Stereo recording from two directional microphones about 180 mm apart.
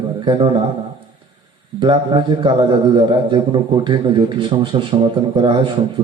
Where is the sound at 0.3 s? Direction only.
25° right (ahead or behind).